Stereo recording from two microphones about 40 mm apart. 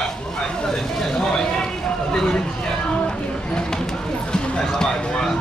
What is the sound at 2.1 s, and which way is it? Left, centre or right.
Speech, centre.